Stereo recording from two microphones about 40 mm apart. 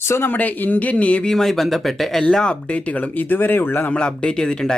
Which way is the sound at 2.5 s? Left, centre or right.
Left.